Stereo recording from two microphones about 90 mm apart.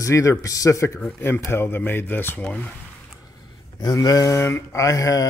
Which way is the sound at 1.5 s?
25° left (ahead or behind).